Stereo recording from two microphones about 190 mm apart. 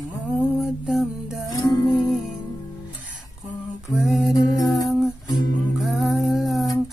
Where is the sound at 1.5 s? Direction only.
20° left (ahead or behind).